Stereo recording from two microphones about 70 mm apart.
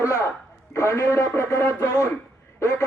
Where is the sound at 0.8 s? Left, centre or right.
Left.